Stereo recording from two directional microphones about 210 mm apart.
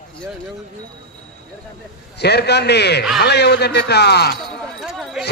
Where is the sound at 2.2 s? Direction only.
50° left (ahead or behind).